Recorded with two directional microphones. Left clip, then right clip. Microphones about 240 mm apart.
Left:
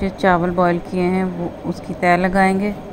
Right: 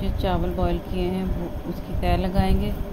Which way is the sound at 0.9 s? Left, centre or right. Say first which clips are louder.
Left 8 dB; left.